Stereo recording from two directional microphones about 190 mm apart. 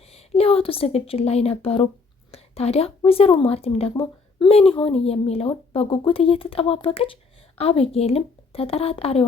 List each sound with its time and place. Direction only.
0.0 s a woman's voice: 30° left (ahead or behind)